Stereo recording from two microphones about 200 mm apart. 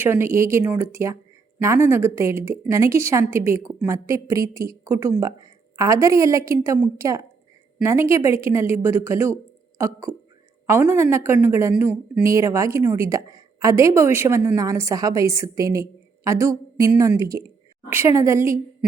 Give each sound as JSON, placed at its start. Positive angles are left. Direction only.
{"t": 0.0, "sound": "speech", "side_deg": -10}